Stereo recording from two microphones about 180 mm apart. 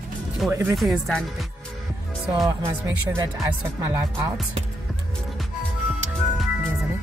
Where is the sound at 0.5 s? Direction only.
15° right (ahead or behind).